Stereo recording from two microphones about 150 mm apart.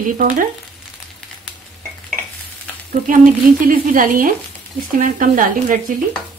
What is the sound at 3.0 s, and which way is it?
Speech, 65° right (ahead or behind).